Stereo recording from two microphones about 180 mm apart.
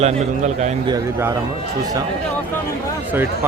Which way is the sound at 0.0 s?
40° right (ahead or behind).